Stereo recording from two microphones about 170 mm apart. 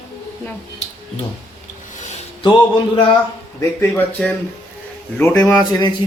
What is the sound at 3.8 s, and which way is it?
Speech, 10° left (ahead or behind).